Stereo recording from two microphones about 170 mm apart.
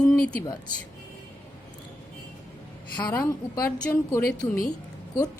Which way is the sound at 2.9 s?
10° left (ahead or behind).